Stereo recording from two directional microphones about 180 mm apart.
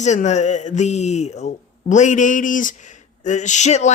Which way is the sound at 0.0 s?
40° left (ahead or behind).